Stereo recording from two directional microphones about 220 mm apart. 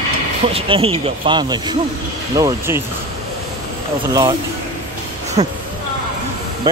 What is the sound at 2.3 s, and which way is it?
Speech, 15° right (ahead or behind).